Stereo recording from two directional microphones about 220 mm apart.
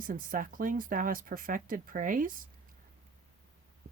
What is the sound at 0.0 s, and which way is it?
Speech, 40° right (ahead or behind).